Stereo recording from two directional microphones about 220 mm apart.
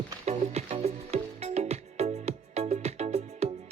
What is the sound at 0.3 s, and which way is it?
Music, 30° right (ahead or behind).